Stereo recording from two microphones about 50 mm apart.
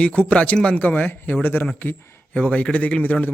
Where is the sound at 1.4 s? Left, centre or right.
Left.